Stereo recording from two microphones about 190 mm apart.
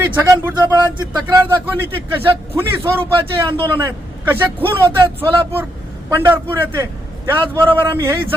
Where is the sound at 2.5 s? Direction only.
10° right (ahead or behind).